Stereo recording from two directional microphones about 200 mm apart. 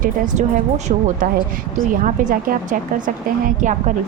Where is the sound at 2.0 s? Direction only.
40° right (ahead or behind).